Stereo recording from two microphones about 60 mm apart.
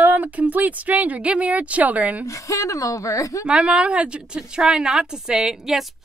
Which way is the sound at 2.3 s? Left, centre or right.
Left.